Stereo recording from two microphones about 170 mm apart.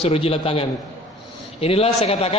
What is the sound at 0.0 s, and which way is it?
A man's voice, 35° left (ahead or behind).